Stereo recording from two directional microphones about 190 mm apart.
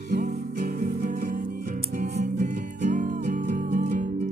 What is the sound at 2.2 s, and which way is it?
Music, 40° right (ahead or behind).